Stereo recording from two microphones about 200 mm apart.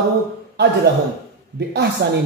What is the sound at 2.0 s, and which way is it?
Speech, 55° right (ahead or behind).